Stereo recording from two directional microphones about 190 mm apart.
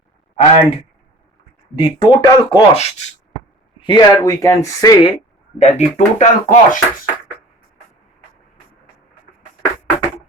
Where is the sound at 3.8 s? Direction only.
25° left (ahead or behind).